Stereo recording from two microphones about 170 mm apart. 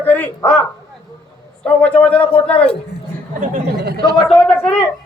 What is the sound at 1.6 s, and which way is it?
Speech, 10° left (ahead or behind).